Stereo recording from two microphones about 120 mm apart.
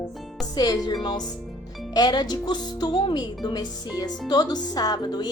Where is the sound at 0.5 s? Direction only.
30° left (ahead or behind).